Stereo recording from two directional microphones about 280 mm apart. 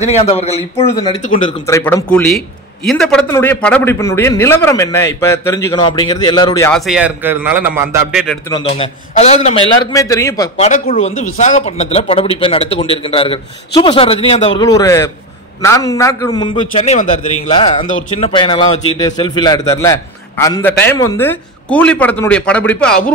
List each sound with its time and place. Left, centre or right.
0.0 s a man's voice: left
6.9 s a man's voice: centre
8.5 s speech: centre
10.7 s a man's voice: left; by 23.1 s centre